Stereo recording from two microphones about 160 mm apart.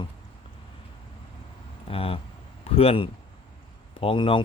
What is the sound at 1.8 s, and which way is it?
Speech, 35° left (ahead or behind).